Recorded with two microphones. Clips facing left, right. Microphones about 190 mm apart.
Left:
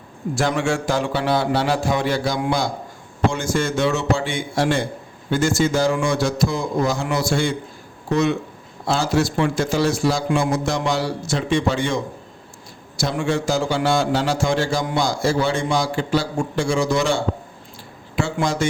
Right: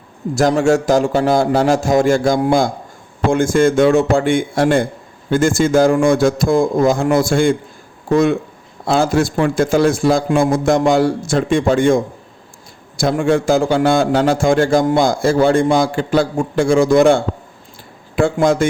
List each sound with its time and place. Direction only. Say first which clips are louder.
0.3 s a man's voice: right 8 dB; 40° right (ahead or behind)